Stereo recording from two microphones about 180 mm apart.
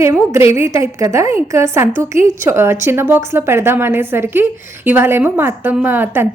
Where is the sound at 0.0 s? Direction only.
15° right (ahead or behind).